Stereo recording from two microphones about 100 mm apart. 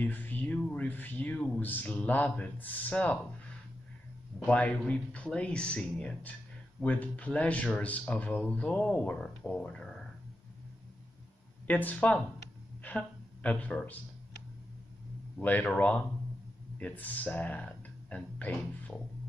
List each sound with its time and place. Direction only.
0.0 s speech: 15° left (ahead or behind)
11.6 s speech: 15° left (ahead or behind)
15.3 s speech: 15° left (ahead or behind)
17.6 s music: 10° left (ahead or behind)